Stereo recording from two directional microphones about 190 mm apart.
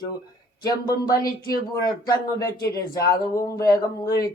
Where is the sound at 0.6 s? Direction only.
20° left (ahead or behind).